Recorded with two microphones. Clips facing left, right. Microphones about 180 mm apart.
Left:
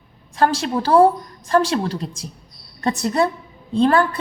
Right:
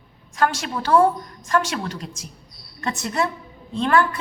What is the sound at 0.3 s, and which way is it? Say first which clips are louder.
A woman's voice: left 4 dB; 30° left (ahead or behind).